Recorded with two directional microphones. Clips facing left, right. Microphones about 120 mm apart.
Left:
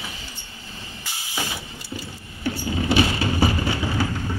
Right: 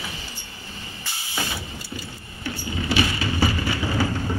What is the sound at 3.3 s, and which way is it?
Music, 20° left (ahead or behind).